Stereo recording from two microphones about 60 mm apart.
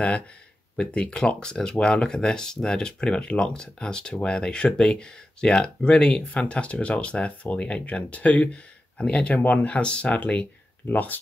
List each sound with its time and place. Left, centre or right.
0.7 s speech: centre